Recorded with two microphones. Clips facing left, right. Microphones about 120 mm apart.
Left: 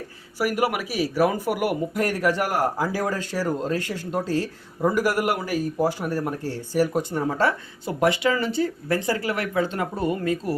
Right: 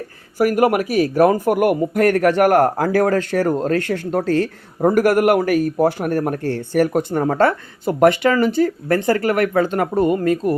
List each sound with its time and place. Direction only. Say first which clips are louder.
0.3 s speech: right 8 dB; 50° right (ahead or behind)